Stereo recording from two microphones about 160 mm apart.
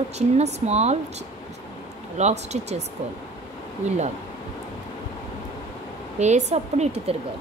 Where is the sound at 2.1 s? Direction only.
45° right (ahead or behind).